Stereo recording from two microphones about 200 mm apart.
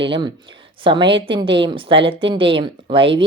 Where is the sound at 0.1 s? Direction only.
20° right (ahead or behind).